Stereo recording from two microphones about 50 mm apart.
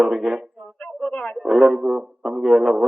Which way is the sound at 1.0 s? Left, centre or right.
Left.